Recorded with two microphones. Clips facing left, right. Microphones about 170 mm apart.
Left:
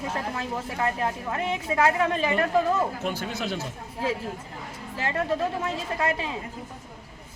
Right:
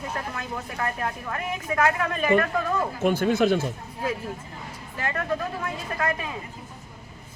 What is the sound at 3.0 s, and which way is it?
Speech, 50° right (ahead or behind).